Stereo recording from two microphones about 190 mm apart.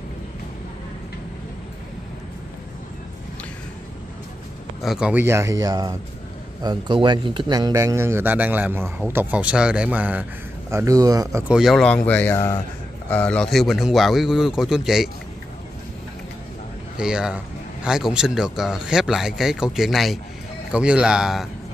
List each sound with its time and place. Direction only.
4.8 s a man's voice: 5° right (ahead or behind)
11.4 s speech: 5° right (ahead or behind)
16.9 s speech: 5° right (ahead or behind)